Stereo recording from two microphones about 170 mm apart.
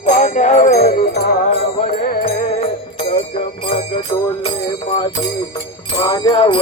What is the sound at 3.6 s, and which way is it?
Music, 35° left (ahead or behind).